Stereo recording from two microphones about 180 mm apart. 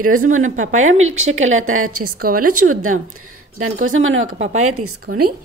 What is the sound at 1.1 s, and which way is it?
Speech, 90° right.